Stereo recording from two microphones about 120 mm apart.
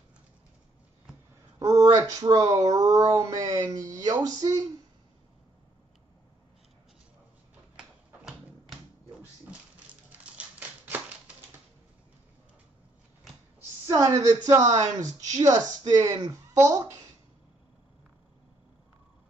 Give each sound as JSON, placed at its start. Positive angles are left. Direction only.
{"t": 1.6, "sound": "a woman's voice", "side_deg": -25}
{"t": 10.1, "sound": "typewriter", "side_deg": -10}
{"t": 10.9, "sound": "a sound", "side_deg": -15}
{"t": 13.8, "sound": "a woman's voice", "side_deg": -25}